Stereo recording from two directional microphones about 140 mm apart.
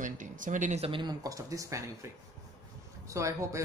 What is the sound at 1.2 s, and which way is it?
Speech, 25° right (ahead or behind).